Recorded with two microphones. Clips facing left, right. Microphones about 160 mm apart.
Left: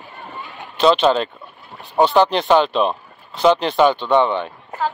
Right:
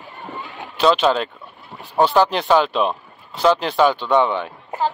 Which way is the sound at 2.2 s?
10° right (ahead or behind).